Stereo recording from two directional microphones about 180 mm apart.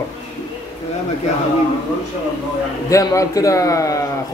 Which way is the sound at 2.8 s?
15° left (ahead or behind).